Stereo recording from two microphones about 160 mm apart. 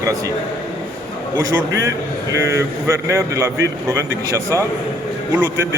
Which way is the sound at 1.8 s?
20° right (ahead or behind).